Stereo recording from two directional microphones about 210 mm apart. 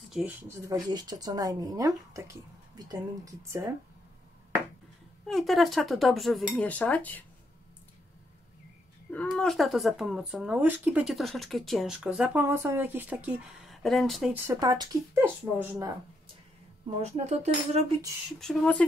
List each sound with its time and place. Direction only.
0.1 s speech: 5° right (ahead or behind)
5.2 s speech: centre (ahead or behind)
9.1 s speech: 5° left (ahead or behind)
14.4 s speech: 15° right (ahead or behind)
17.0 s speech: 35° right (ahead or behind)
18.4 s speech: 5° left (ahead or behind)